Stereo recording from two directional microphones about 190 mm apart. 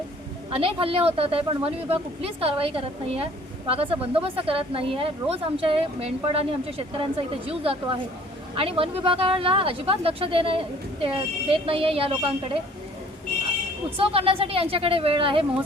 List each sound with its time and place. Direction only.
0.5 s speech: 30° right (ahead or behind)
13.9 s speech: 30° right (ahead or behind)